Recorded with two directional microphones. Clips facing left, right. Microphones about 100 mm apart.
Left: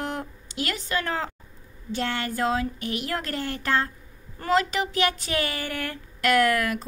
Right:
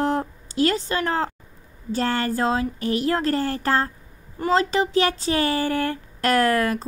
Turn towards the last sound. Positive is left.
turn(degrees=-35)  # may be behind; listen again after turning